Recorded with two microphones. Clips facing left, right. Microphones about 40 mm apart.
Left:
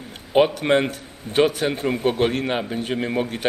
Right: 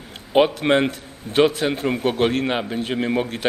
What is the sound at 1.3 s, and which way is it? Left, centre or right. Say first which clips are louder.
Speech: right 1 dB; right.